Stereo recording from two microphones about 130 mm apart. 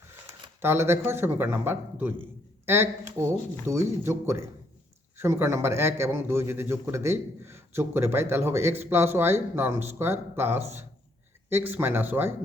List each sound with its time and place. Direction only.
0.6 s a man's voice: 20° right (ahead or behind)